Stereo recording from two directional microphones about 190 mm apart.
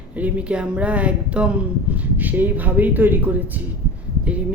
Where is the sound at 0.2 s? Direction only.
5° right (ahead or behind).